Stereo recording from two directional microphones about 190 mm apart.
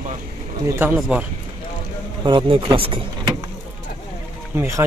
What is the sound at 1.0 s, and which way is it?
Speech, 5° right (ahead or behind).